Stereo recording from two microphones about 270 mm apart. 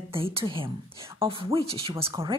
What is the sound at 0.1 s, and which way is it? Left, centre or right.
A woman's voice, centre.